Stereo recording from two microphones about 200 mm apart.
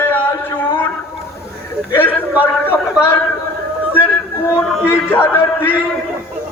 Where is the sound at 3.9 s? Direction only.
10° left (ahead or behind).